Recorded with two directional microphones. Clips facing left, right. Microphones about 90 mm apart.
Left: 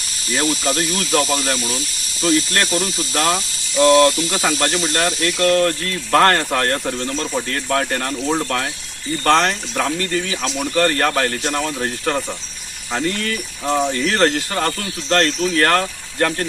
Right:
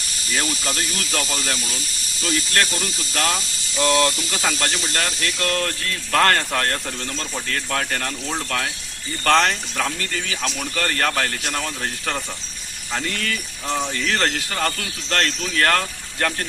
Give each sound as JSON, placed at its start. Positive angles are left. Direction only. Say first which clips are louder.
{"t": 0.3, "sound": "speech", "louder": "left 6 dB", "side_deg": 30}
{"t": 10.0, "sound": "speech", "louder": "left 5 dB", "side_deg": 30}
{"t": 14.1, "sound": "speech", "louder": "left 5 dB", "side_deg": 30}